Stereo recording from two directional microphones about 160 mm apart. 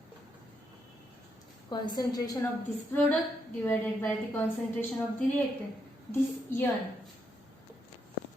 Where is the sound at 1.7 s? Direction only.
25° left (ahead or behind).